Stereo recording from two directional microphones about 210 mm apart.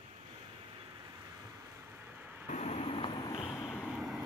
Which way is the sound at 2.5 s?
30° left (ahead or behind).